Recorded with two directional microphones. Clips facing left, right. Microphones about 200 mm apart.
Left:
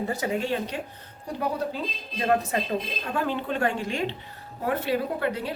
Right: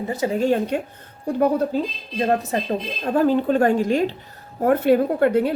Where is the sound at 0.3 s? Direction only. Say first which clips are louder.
Right 8 dB; 45° right (ahead or behind).